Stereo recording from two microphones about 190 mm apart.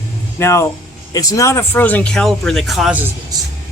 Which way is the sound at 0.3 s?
15° left (ahead or behind).